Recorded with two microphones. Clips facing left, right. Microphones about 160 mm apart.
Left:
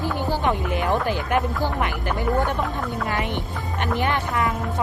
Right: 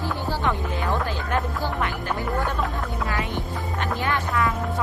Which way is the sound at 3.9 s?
20° left (ahead or behind).